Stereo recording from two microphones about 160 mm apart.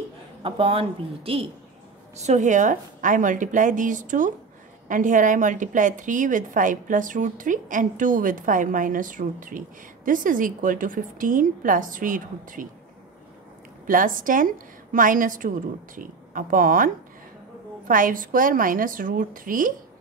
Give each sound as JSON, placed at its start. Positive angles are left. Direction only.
{"t": 0.4, "sound": "speech", "side_deg": -35}
{"t": 2.1, "sound": "a woman's voice", "side_deg": -45}
{"t": 13.8, "sound": "a woman's voice", "side_deg": -60}